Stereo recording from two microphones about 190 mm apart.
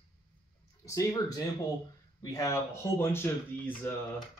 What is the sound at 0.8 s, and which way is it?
Speech, 15° left (ahead or behind).